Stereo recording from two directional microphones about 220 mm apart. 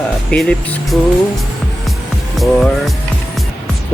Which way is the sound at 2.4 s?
Centre (ahead or behind).